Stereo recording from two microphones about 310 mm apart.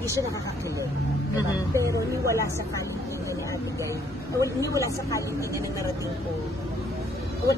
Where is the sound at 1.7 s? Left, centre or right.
Centre.